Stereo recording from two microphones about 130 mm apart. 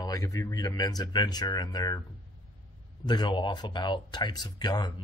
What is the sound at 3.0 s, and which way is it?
Speech, 35° left (ahead or behind).